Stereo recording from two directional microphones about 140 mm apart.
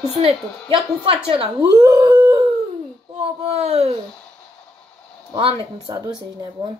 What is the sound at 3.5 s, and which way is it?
Speech, 45° right (ahead or behind).